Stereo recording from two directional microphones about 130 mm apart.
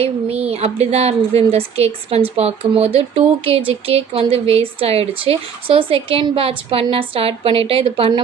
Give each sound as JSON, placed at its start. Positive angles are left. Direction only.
{"t": 0.0, "sound": "speech", "side_deg": -50}